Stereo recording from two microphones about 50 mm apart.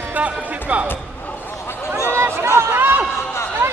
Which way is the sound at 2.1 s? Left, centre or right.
Right.